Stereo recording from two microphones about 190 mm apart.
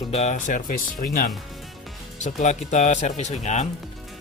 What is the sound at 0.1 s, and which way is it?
Speech, 35° left (ahead or behind).